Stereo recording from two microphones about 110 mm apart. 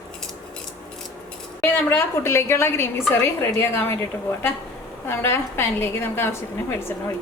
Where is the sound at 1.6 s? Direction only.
20° left (ahead or behind).